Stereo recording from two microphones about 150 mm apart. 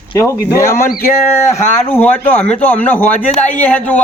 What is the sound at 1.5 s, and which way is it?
Speech, 45° left (ahead or behind).